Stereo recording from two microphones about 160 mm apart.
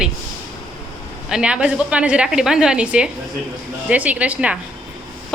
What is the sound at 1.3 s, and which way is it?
A woman's voice, 5° right (ahead or behind).